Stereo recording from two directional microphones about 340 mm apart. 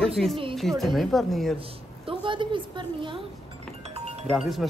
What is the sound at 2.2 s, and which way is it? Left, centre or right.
A woman's voice, centre.